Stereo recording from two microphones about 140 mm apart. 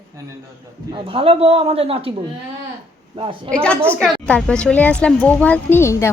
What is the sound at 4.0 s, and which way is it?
Speech, 5° left (ahead or behind).